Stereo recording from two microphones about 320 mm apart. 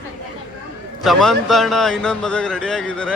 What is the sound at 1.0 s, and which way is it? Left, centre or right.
Speech, centre.